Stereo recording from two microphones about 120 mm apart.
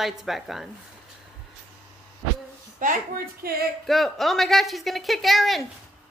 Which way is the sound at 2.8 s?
90° right.